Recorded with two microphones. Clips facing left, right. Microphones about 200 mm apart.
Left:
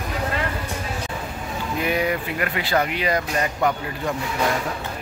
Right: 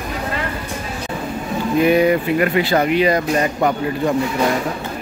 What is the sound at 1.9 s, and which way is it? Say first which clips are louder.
Speech: right 8 dB; 25° right (ahead or behind).